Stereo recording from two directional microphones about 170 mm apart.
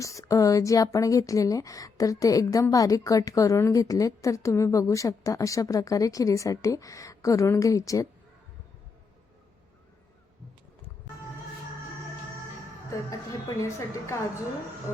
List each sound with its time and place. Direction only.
0.0 s a woman's voice: 20° left (ahead or behind)
13.6 s a woman's voice: 15° left (ahead or behind)